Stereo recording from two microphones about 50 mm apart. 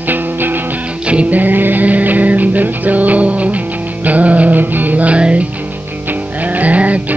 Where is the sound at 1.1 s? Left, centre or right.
Right.